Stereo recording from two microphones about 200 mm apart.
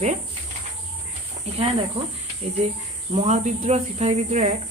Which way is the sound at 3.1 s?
35° right (ahead or behind).